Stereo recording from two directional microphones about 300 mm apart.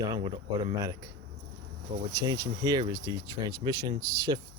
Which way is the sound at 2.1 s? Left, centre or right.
Centre.